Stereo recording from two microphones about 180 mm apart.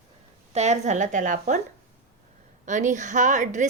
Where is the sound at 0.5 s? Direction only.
40° right (ahead or behind).